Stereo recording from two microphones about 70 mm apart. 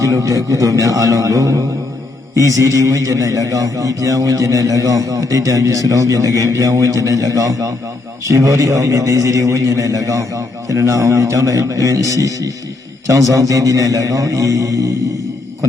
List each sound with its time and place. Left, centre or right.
0.0 s a man's voice: right